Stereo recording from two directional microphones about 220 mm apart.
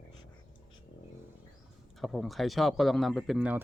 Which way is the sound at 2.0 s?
Centre (ahead or behind).